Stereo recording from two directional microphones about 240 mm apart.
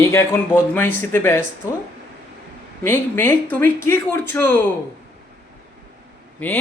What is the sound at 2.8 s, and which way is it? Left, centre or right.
A woman's voice, centre.